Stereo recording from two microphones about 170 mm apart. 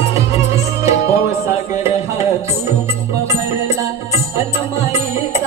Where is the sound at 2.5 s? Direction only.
15° right (ahead or behind).